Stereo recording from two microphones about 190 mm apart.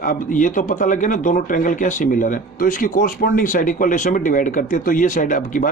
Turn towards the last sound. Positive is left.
turn(degrees=45)  # may be behind; listen again after turning